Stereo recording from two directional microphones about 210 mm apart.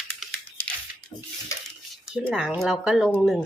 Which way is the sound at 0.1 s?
5° left (ahead or behind).